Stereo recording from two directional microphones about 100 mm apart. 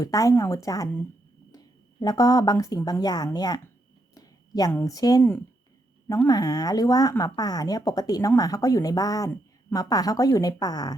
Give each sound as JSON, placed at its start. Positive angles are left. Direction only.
{"t": 0.0, "sound": "a woman's voice", "side_deg": 35}
{"t": 4.1, "sound": "a sound", "side_deg": 40}
{"t": 4.9, "sound": "a woman's voice", "side_deg": 35}
{"t": 6.2, "sound": "a woman's voice", "side_deg": 40}